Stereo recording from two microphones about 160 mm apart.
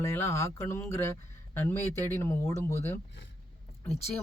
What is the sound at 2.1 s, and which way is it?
Speech, 15° left (ahead or behind).